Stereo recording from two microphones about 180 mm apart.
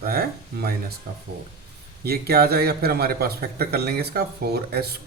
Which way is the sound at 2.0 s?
60° right (ahead or behind).